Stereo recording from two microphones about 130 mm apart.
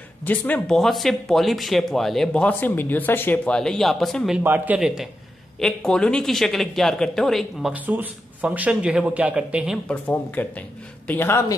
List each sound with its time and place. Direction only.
0.2 s speech: 15° left (ahead or behind)
0.7 s speech: centre (ahead or behind)
4.4 s a man's voice: 15° right (ahead or behind)
7.7 s a man's voice: 15° right (ahead or behind)
9.8 s a man's voice: 10° left (ahead or behind)